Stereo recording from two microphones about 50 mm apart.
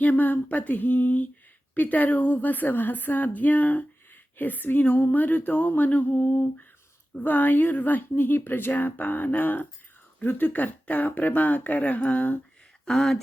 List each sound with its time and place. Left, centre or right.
0.0 s speech: left
12.8 s speech: centre